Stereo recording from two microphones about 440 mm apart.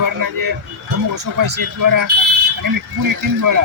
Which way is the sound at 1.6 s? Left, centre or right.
Right.